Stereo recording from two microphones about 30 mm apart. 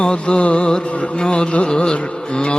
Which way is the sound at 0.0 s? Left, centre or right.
Left.